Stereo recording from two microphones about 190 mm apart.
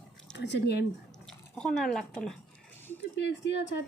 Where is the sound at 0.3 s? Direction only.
65° left (ahead or behind).